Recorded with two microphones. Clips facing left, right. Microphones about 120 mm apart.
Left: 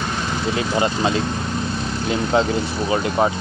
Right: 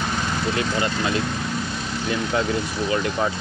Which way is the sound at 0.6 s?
25° left (ahead or behind).